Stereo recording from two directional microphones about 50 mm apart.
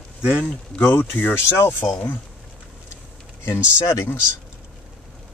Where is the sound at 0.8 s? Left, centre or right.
Left.